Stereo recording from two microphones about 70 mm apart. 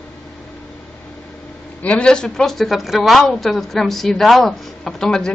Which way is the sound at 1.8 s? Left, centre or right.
Centre.